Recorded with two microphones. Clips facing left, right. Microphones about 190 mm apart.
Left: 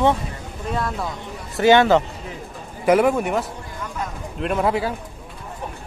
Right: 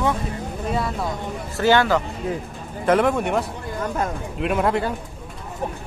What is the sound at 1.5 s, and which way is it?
Speech, 20° left (ahead or behind).